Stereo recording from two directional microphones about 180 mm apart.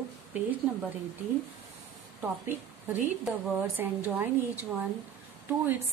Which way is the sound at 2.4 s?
10° right (ahead or behind).